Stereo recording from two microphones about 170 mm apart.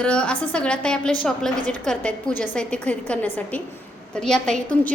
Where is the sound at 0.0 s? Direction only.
5° left (ahead or behind).